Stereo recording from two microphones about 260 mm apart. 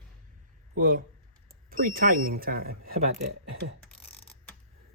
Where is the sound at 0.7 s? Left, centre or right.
Right.